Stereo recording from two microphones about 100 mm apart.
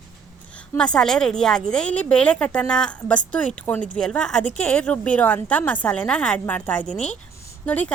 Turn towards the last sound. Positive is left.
turn(degrees=15)  # may be behind; listen again after turning